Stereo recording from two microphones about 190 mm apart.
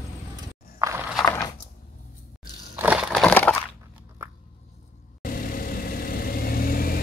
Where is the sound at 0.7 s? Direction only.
15° right (ahead or behind).